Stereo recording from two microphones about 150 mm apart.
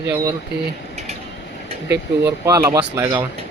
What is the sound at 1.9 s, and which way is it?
Speech, 20° right (ahead or behind).